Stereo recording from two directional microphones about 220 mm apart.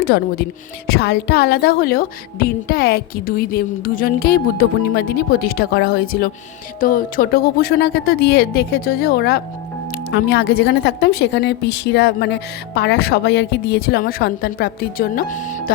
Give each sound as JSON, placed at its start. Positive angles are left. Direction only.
{"t": 0.0, "sound": "speech", "side_deg": 45}